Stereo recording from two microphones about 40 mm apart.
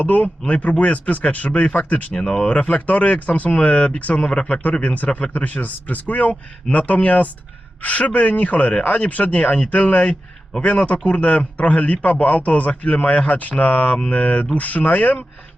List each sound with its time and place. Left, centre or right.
0.0 s a man's voice: left
2.1 s speech: left
2.5 s a man's voice: left
4.2 s speech: left
4.4 s a man's voice: left